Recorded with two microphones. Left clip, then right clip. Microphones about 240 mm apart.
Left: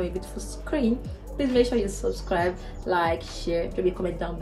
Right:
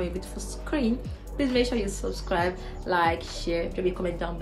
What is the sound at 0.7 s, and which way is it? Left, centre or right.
Speech, centre.